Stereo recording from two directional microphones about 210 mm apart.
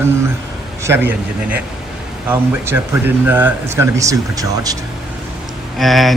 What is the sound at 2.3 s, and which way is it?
Speech, 10° right (ahead or behind).